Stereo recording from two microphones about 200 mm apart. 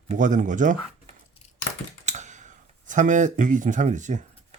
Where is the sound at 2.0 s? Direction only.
35° right (ahead or behind).